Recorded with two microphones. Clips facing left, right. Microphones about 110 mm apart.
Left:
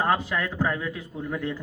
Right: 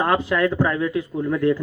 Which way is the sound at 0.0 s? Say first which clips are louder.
Right 6 dB; 90° right.